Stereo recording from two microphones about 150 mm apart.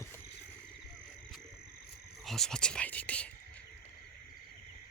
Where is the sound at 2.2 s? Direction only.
Centre (ahead or behind).